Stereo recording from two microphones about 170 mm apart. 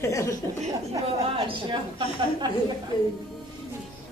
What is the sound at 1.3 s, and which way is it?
A man's voice, 30° right (ahead or behind).